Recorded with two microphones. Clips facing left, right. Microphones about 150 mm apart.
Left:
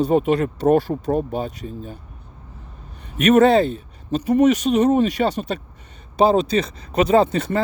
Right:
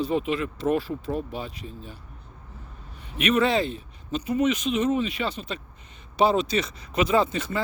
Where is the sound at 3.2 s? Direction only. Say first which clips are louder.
Left 9 dB; 45° left (ahead or behind).